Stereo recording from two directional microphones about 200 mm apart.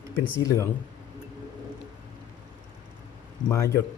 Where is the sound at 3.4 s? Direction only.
15° left (ahead or behind).